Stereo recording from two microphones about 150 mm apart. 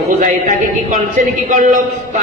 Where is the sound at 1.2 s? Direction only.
65° right (ahead or behind).